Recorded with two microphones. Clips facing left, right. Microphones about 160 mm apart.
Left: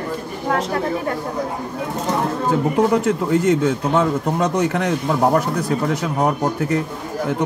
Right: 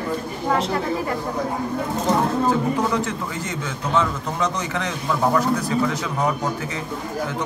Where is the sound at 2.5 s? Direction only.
60° left (ahead or behind).